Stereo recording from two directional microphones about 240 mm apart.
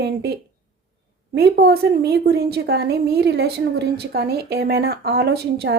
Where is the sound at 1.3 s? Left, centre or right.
Right.